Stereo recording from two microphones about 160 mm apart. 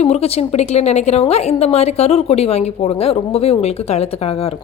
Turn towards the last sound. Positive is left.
turn(degrees=40)  # may be behind; listen again after turning